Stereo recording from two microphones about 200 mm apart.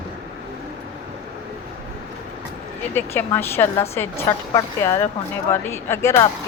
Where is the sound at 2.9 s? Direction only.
10° left (ahead or behind).